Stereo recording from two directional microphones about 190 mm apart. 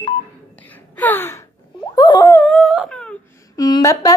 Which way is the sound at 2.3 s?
5° left (ahead or behind).